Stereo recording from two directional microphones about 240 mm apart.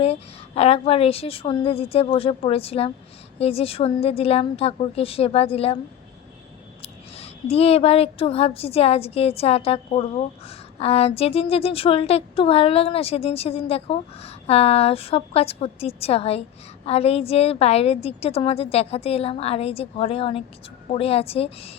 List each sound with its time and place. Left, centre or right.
0.0 s a woman's voice: left
6.8 s a woman's voice: left